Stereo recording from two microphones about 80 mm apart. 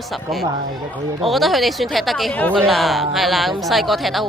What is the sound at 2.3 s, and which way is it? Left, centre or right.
Speech, centre.